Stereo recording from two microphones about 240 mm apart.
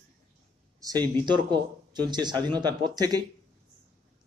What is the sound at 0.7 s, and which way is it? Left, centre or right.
Speech, centre.